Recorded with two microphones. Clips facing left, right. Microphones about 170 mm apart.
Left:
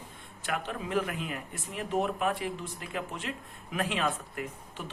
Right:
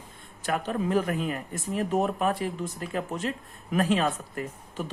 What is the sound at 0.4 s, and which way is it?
Speech, 40° right (ahead or behind).